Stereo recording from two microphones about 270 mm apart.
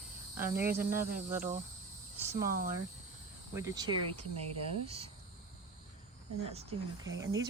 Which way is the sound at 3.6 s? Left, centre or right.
Centre.